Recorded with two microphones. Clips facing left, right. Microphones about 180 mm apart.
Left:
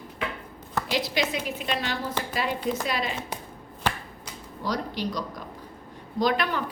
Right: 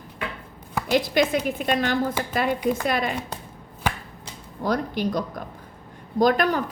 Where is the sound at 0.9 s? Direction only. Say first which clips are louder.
Right 8 dB; 50° right (ahead or behind).